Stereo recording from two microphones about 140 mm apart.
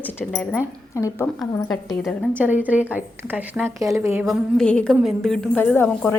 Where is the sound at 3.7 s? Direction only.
20° right (ahead or behind).